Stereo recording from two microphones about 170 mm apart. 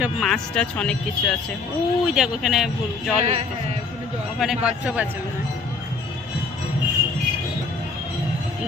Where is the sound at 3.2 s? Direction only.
40° right (ahead or behind).